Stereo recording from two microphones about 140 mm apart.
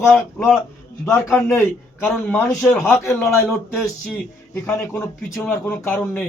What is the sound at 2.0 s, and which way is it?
Speech, 5° left (ahead or behind).